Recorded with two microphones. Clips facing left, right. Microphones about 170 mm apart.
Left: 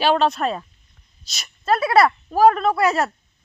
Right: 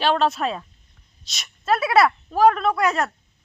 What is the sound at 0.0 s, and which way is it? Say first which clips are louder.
A woman's voice: left 2 dB; centre (ahead or behind).